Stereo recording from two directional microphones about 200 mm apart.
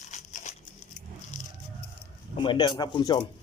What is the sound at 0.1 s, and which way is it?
Crumpling, 35° left (ahead or behind).